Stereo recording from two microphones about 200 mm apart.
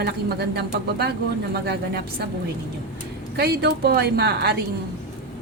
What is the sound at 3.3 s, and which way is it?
A woman's voice, 55° right (ahead or behind).